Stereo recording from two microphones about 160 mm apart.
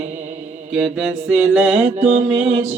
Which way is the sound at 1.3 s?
10° right (ahead or behind).